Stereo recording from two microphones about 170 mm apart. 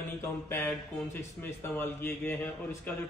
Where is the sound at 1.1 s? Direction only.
15° left (ahead or behind).